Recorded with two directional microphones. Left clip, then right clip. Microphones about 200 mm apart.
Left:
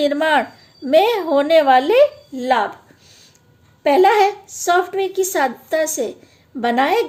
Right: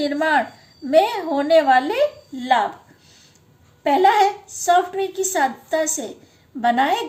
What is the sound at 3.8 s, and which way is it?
A woman's voice, 45° left (ahead or behind).